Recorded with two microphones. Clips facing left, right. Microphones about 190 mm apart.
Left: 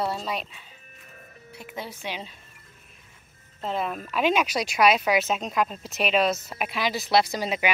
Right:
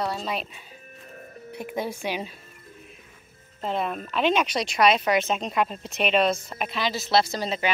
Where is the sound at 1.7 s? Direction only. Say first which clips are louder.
Right 6 dB; 15° right (ahead or behind).